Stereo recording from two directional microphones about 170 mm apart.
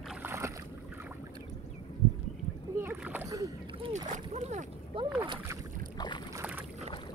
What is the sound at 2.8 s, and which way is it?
Splash, 10° right (ahead or behind).